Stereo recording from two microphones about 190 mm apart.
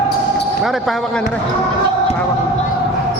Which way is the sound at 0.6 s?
Centre (ahead or behind).